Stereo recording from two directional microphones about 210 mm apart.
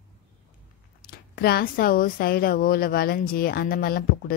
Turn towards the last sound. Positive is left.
turn(degrees=45)  # may be behind; listen again after turning